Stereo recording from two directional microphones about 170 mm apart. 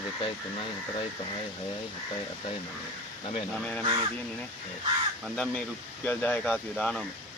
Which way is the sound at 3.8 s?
25° right (ahead or behind).